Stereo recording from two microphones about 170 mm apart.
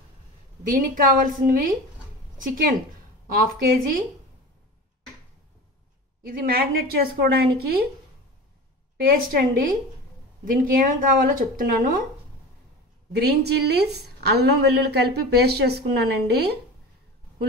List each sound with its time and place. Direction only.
0.7 s a woman's voice: 55° right (ahead or behind)
6.2 s speech: 60° right (ahead or behind)
9.0 s speech: 60° right (ahead or behind)
13.1 s a woman's voice: 75° right (ahead or behind)